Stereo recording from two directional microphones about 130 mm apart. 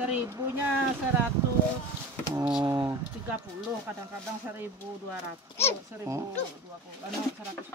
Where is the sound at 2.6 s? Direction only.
25° right (ahead or behind).